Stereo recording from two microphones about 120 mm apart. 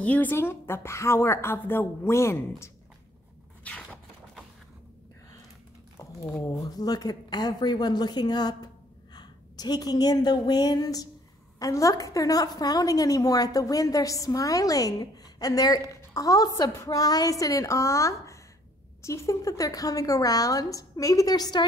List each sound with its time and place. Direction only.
0.0 s a woman's voice: 15° left (ahead or behind)
3.7 s a sound: 10° left (ahead or behind)
5.9 s a woman's voice: 25° left (ahead or behind)